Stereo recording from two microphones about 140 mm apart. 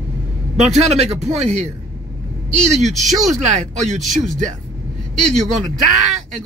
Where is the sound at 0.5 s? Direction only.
50° right (ahead or behind).